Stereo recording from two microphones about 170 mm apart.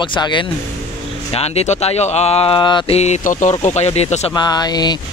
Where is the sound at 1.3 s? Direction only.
40° left (ahead or behind).